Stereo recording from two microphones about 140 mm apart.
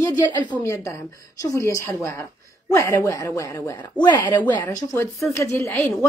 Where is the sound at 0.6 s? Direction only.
20° left (ahead or behind).